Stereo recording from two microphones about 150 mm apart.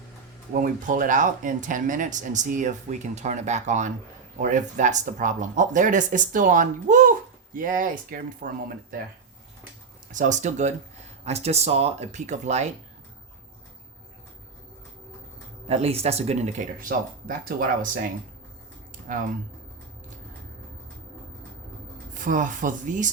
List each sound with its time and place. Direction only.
0.5 s speech: 65° right (ahead or behind)
10.1 s speech: 55° right (ahead or behind)
15.6 s speech: 45° right (ahead or behind)
17.2 s speech: 70° right (ahead or behind)
22.1 s speech: 60° right (ahead or behind)